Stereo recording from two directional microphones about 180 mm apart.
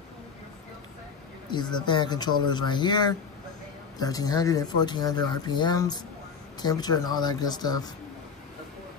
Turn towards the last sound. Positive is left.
turn(degrees=20)  # may be behind; listen again after turning